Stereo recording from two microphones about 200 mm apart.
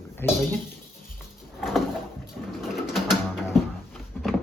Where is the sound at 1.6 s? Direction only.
Centre (ahead or behind).